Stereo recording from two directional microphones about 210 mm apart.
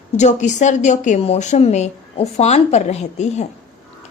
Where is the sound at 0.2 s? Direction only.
35° left (ahead or behind).